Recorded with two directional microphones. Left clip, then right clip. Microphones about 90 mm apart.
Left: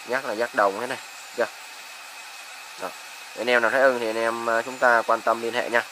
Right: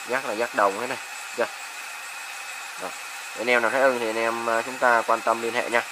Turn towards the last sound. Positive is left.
turn(degrees=0)  # may be behind; listen again after turning